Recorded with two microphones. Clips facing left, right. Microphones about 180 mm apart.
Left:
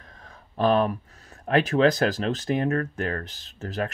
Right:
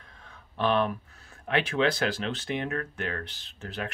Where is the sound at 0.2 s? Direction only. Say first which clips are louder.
Left 5 dB; 40° left (ahead or behind).